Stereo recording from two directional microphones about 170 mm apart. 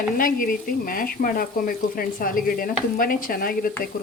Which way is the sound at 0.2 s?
55° left (ahead or behind).